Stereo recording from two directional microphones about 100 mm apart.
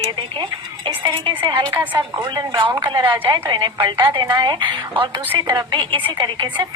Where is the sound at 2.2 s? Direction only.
55° right (ahead or behind).